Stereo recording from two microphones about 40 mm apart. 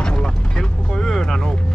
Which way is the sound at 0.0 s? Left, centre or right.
Left.